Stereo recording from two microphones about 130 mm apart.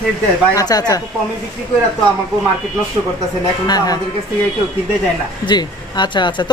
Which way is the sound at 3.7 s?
30° left (ahead or behind).